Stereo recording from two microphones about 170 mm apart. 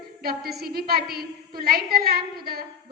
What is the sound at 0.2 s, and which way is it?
A woman's voice, 65° right (ahead or behind).